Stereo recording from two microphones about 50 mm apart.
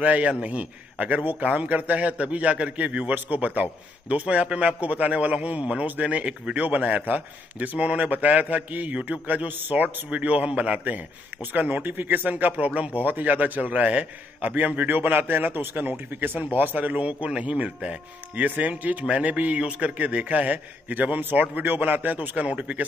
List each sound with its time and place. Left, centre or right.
0.0 s a man's voice: right
11.5 s a man's voice: right